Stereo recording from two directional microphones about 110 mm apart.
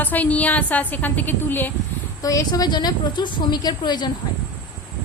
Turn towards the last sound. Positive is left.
turn(degrees=40)  # may be behind; listen again after turning